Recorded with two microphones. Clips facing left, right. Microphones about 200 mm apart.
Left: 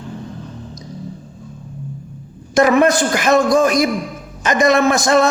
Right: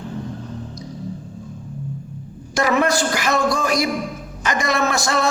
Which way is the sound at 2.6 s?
20° left (ahead or behind).